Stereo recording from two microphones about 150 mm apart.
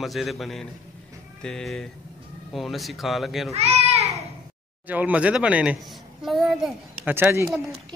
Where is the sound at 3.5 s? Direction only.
45° right (ahead or behind).